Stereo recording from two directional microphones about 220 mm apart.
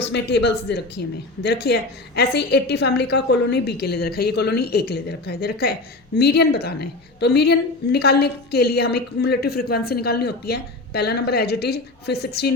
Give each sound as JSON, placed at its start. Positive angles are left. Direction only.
{"t": 0.1, "sound": "a woman's voice", "side_deg": 50}